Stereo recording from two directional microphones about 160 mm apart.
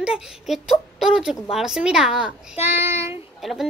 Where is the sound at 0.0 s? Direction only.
5° right (ahead or behind).